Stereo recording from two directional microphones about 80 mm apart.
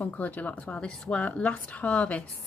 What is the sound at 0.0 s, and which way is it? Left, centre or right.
Speech, centre.